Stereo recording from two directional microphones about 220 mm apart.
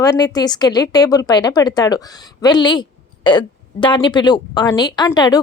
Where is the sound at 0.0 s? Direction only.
15° left (ahead or behind).